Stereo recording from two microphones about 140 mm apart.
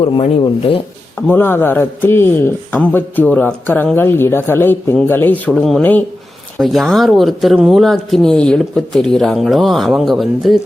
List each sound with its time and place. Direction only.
0.0 s speech: 40° left (ahead or behind)
1.3 s a man's voice: 15° left (ahead or behind)
5.5 s speech: centre (ahead or behind)